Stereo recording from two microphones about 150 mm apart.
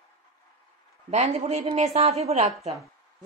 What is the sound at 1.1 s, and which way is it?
A woman's voice, 45° right (ahead or behind).